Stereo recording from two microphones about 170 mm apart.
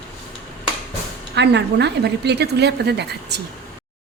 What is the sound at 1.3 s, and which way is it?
A woman's voice, 85° right.